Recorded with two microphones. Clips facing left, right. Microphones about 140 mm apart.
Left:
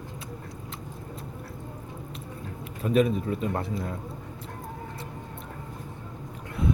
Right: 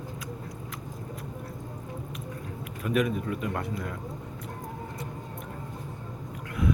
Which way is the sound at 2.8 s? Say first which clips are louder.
Left 4 dB; 30° left (ahead or behind).